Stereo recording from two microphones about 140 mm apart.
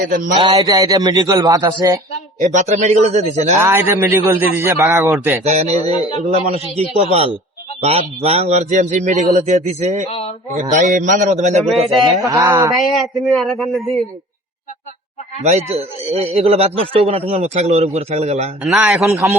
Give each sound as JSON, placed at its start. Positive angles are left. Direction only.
{"t": 0.3, "sound": "a man's voice", "side_deg": -35}
{"t": 2.4, "sound": "a man's voice", "side_deg": -55}
{"t": 3.6, "sound": "a man's voice", "side_deg": -15}
{"t": 5.4, "sound": "a man's voice", "side_deg": -50}
{"t": 10.1, "sound": "speech", "side_deg": 45}
{"t": 10.5, "sound": "a man's voice", "side_deg": -55}
{"t": 10.9, "sound": "a man's voice", "side_deg": -70}
{"t": 11.6, "sound": "a man's voice", "side_deg": 0}
{"t": 12.2, "sound": "a man's voice", "side_deg": -25}
{"t": 12.7, "sound": "a man's voice", "side_deg": 0}
{"t": 15.4, "sound": "a man's voice", "side_deg": -50}
{"t": 18.6, "sound": "a man's voice", "side_deg": 0}
{"t": 19.1, "sound": "a man's voice", "side_deg": -20}